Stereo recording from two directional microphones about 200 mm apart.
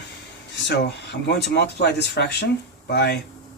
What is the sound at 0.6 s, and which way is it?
Speech, 55° left (ahead or behind).